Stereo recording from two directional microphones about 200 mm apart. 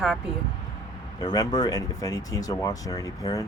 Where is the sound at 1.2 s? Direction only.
20° left (ahead or behind).